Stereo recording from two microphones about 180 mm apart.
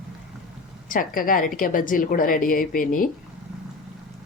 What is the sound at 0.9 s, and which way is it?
A woman's voice, 50° left (ahead or behind).